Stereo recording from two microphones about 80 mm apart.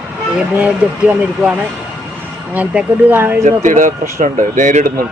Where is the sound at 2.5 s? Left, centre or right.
Centre.